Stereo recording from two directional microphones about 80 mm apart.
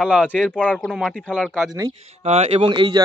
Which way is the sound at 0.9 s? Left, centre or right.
Centre.